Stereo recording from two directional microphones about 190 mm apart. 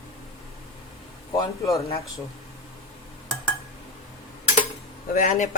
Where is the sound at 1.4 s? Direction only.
20° left (ahead or behind).